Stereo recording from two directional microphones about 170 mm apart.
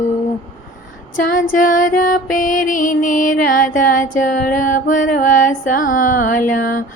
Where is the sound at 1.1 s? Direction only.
50° left (ahead or behind).